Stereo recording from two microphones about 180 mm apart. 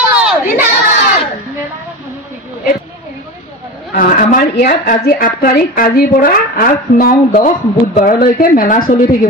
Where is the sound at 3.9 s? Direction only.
50° left (ahead or behind).